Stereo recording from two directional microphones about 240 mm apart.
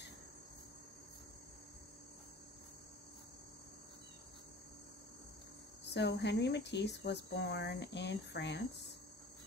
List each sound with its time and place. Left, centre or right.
5.9 s speech: left